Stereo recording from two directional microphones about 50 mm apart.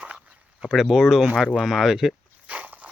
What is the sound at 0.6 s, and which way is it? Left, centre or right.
Speech, centre.